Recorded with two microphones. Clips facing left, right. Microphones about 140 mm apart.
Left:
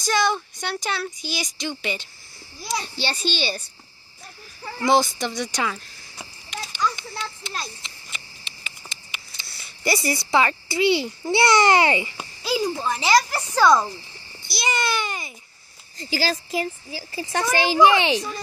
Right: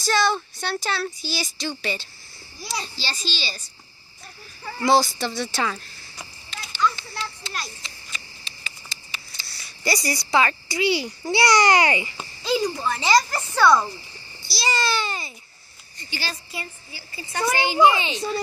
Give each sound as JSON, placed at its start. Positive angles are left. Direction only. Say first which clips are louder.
{"t": 0.0, "sound": "speech", "louder": "even", "side_deg": 15}
{"t": 2.8, "sound": "a child's voice", "louder": "left 5 dB", "side_deg": 60}
{"t": 4.8, "sound": "speech", "louder": "even", "side_deg": 20}
{"t": 6.5, "sound": "children playing", "louder": "left 5 dB", "side_deg": 15}
{"t": 7.0, "sound": "a sound", "louder": "left 1 dB", "side_deg": 20}
{"t": 11.3, "sound": "speech", "louder": "left 1 dB", "side_deg": 25}
{"t": 12.2, "sound": "a sound", "louder": "right 1 dB", "side_deg": 10}
{"t": 12.6, "sound": "speech", "louder": "left 1 dB", "side_deg": 20}
{"t": 13.0, "sound": "speech", "louder": "even", "side_deg": 5}
{"t": 13.5, "sound": "speech", "louder": "left 1 dB", "side_deg": 20}
{"t": 16.0, "sound": "a child's voice", "louder": "left 8 dB", "side_deg": 90}